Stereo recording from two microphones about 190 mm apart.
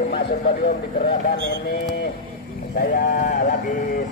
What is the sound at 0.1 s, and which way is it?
Speech, 60° left (ahead or behind).